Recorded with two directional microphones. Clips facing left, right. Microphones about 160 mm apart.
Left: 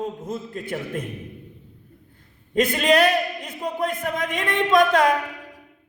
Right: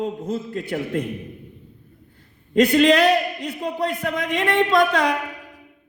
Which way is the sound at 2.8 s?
50° left (ahead or behind).